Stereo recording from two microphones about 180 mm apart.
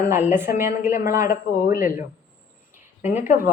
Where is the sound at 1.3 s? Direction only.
55° left (ahead or behind).